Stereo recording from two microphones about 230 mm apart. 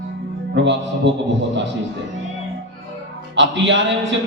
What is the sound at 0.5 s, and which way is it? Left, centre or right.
Speech, right.